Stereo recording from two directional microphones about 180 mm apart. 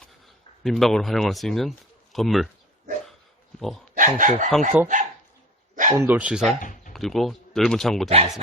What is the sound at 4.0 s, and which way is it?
Speech, 45° right (ahead or behind).